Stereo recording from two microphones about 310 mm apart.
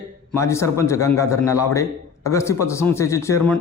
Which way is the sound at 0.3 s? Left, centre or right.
Centre.